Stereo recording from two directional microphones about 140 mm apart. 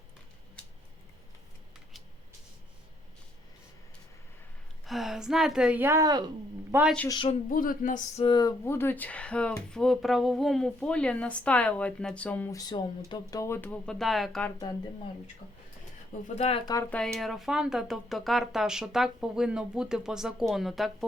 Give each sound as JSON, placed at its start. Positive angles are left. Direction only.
{"t": 4.9, "sound": "speech", "side_deg": 0}
{"t": 6.7, "sound": "speech", "side_deg": -15}
{"t": 7.5, "sound": "speech", "side_deg": 80}
{"t": 8.2, "sound": "speech", "side_deg": 30}
{"t": 8.6, "sound": "a woman's voice", "side_deg": 15}
{"t": 12.5, "sound": "a woman's voice", "side_deg": 25}
{"t": 14.6, "sound": "speech", "side_deg": 30}
{"t": 16.2, "sound": "speech", "side_deg": 50}
{"t": 16.9, "sound": "speech", "side_deg": 5}